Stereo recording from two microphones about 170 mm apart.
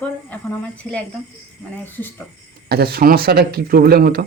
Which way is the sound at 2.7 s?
65° right (ahead or behind).